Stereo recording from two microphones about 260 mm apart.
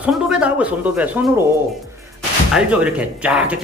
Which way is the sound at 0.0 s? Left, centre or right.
Centre.